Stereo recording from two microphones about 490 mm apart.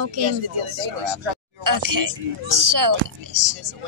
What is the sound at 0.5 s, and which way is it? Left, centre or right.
Speech, right.